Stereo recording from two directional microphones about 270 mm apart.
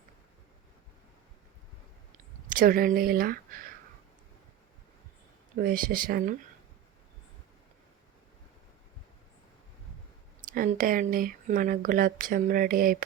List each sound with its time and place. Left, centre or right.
2.5 s speech: right
5.5 s speech: right
10.5 s speech: right